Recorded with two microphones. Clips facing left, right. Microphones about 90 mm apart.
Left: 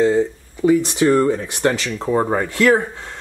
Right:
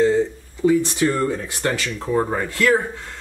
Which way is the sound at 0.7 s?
20° left (ahead or behind).